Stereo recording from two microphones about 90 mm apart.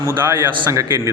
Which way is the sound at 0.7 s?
35° right (ahead or behind).